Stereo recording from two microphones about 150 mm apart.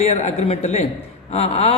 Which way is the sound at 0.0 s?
50° left (ahead or behind).